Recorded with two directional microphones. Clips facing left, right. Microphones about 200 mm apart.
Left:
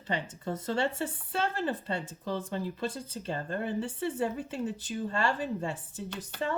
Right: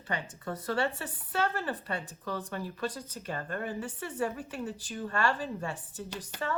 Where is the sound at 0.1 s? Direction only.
25° left (ahead or behind).